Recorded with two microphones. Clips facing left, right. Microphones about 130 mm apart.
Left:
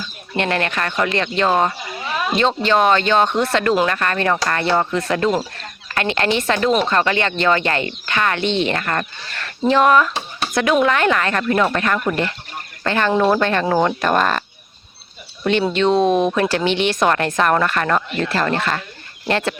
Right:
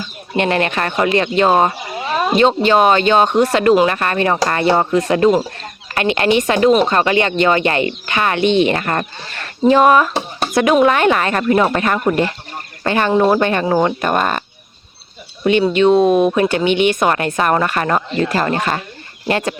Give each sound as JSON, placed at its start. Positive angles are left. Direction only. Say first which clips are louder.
{"t": 0.3, "sound": "speech", "louder": "right 4 dB", "side_deg": -20}
{"t": 2.0, "sound": "a sound", "louder": "right 5 dB", "side_deg": -35}
{"t": 2.4, "sound": "speech", "louder": "right 4 dB", "side_deg": -15}
{"t": 15.7, "sound": "speech", "louder": "right 4 dB", "side_deg": -10}